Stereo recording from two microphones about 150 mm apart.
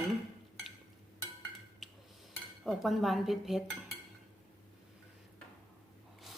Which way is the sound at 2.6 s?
Centre (ahead or behind).